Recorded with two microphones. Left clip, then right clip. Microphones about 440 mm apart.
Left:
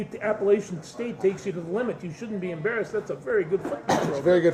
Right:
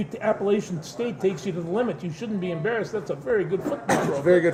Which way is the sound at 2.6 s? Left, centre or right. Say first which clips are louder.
Even; right.